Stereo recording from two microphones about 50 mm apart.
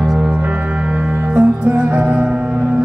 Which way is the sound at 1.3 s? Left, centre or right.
Right.